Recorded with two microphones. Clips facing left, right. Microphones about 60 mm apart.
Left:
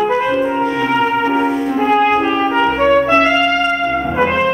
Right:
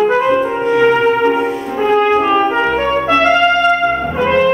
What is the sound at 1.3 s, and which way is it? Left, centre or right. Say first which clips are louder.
Brass instrument: even; centre.